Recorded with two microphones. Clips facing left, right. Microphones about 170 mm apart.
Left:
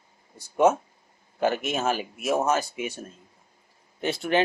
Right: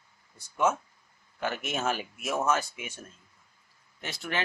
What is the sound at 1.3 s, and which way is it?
Speech, 30° left (ahead or behind).